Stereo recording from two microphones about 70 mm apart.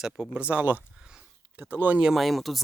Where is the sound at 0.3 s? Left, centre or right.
Centre.